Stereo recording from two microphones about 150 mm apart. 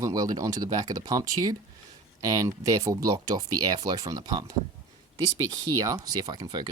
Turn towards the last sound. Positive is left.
turn(degrees=-25)  # may be behind; listen again after turning